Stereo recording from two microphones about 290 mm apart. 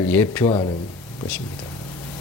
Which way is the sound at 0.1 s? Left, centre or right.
Centre.